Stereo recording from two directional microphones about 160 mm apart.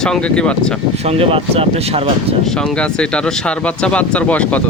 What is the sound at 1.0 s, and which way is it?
Speech, 35° right (ahead or behind).